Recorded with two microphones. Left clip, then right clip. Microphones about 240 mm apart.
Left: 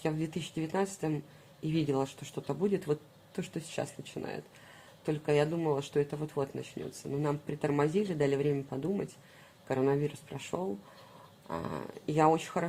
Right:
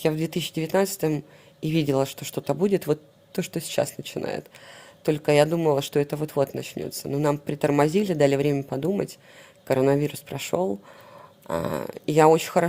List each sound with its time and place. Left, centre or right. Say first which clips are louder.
0.0 s speech: right 10 dB; right